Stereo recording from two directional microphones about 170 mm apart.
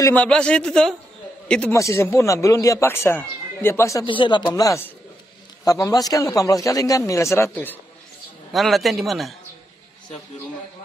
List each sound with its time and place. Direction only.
0.0 s a man's voice: 10° left (ahead or behind)
1.8 s speech: 15° left (ahead or behind)
4.0 s a man's voice: 30° left (ahead or behind); by 7.8 s 10° left (ahead or behind)
8.5 s a man's voice: centre (ahead or behind)